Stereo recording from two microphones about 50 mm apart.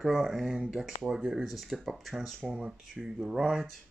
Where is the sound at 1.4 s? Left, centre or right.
Centre.